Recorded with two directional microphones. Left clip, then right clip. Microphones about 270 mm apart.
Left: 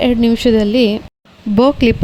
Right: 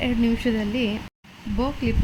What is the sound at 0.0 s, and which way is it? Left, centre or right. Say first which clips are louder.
A woman's voice: left 11 dB; left.